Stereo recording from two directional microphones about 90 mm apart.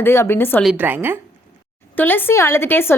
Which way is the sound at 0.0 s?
25° left (ahead or behind).